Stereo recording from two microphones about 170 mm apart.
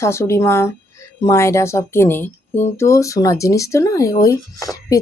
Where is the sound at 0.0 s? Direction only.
15° left (ahead or behind).